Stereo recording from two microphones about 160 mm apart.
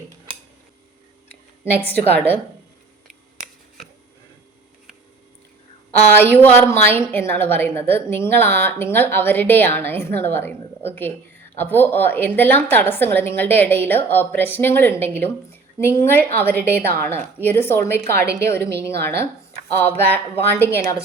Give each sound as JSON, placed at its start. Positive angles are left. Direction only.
{"t": 1.9, "sound": "a woman's voice", "side_deg": 10}
{"t": 6.1, "sound": "a woman's voice", "side_deg": 10}
{"t": 18.1, "sound": "a woman's voice", "side_deg": -85}
{"t": 18.4, "sound": "a woman's voice", "side_deg": 15}
{"t": 20.1, "sound": "a woman's voice", "side_deg": 10}